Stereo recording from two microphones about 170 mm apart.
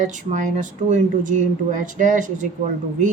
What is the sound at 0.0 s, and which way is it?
Speech, 45° right (ahead or behind).